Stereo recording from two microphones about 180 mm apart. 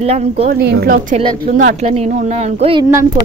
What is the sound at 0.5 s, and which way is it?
Speech, 60° right (ahead or behind).